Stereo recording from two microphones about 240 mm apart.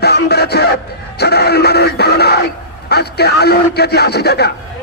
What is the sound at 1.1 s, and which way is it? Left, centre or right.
Music, left.